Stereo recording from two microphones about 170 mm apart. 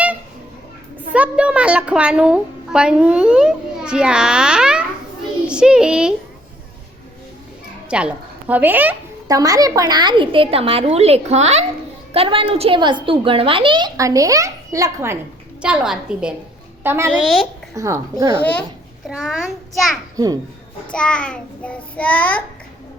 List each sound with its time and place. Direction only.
1.1 s a child's voice: 5° right (ahead or behind)
5.5 s child singing: 5° right (ahead or behind)
7.9 s a woman's voice: 5° right (ahead or behind)
9.2 s a woman's voice: 20° right (ahead or behind)
15.6 s a child's voice: 5° right (ahead or behind)
17.2 s a child's voice: centre (ahead or behind)
17.7 s a woman's voice: 20° right (ahead or behind)
18.3 s a child's voice: 10° left (ahead or behind)
20.1 s a woman's voice: 20° right (ahead or behind)
20.9 s a child's voice: 5° left (ahead or behind)